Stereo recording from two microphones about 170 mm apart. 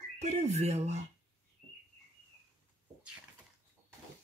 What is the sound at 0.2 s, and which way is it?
Speech, 40° right (ahead or behind).